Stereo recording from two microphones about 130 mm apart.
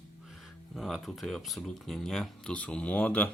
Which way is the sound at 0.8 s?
Centre (ahead or behind).